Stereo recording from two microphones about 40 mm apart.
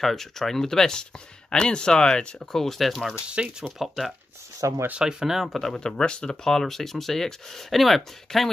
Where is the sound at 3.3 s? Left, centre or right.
Right.